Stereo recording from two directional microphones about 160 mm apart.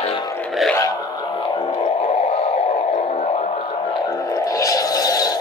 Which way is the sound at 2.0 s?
40° left (ahead or behind).